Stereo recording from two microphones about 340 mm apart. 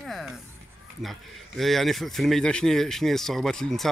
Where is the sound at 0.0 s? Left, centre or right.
Centre.